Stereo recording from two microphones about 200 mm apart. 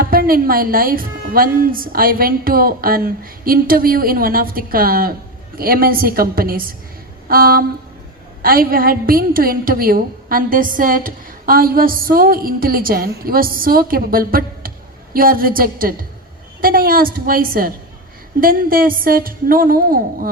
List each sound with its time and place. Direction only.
0.0 s a woman's voice: 45° right (ahead or behind)